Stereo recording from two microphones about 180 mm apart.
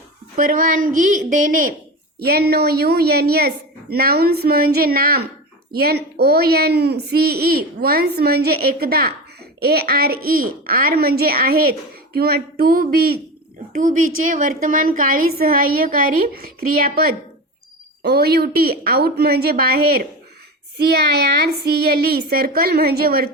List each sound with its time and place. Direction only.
0.3 s a woman's voice: 50° right (ahead or behind)
13.7 s a woman's voice: 45° right (ahead or behind)